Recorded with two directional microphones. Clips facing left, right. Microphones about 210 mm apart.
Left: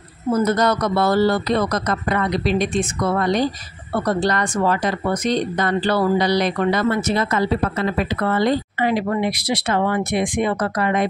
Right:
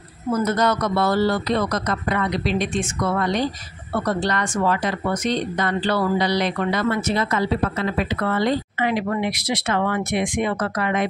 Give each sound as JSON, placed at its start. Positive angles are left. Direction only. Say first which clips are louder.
{"t": 0.3, "sound": "speech", "louder": "left 2 dB", "side_deg": 35}